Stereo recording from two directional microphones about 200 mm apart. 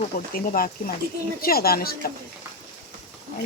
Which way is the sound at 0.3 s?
45° left (ahead or behind).